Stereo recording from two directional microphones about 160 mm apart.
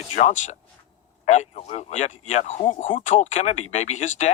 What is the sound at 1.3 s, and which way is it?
Speech, 45° left (ahead or behind).